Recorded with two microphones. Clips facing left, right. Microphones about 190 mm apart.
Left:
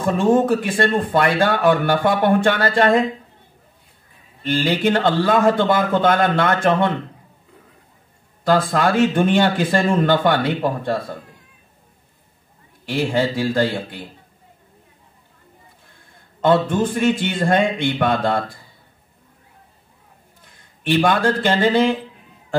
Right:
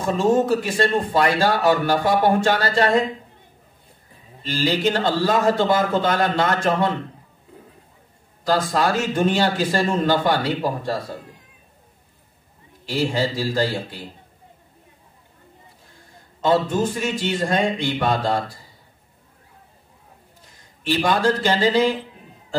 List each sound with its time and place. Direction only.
0.2 s speech: 55° left (ahead or behind)
4.4 s speech: 55° left (ahead or behind)
8.5 s speech: 55° left (ahead or behind)
12.8 s speech: 55° left (ahead or behind)
16.3 s speech: 55° left (ahead or behind)
20.8 s speech: 60° left (ahead or behind)